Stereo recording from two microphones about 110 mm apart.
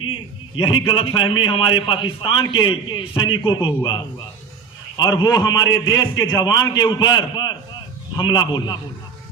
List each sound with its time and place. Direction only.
0.6 s a man's voice: 50° left (ahead or behind)
4.9 s a man's voice: 40° left (ahead or behind)